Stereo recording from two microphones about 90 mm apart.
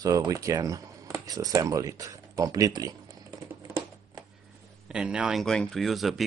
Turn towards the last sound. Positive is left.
turn(degrees=0)  # may be behind; listen again after turning